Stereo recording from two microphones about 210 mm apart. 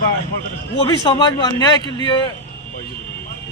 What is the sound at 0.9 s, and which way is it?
A man's voice, 20° left (ahead or behind).